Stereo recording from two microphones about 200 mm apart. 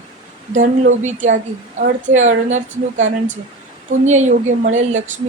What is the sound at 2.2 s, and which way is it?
Speech, 35° right (ahead or behind).